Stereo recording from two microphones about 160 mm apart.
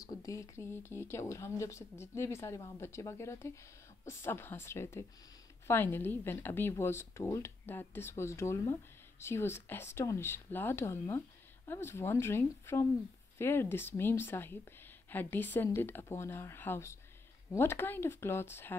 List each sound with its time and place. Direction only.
0.0 s speech: 20° left (ahead or behind)